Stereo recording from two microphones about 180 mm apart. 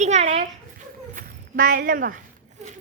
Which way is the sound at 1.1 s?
55° right (ahead or behind).